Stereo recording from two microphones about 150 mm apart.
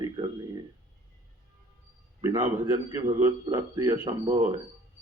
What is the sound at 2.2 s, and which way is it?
A man's voice, 20° right (ahead or behind).